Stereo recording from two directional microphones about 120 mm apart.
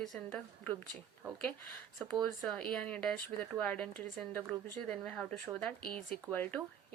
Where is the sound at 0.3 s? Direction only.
15° left (ahead or behind).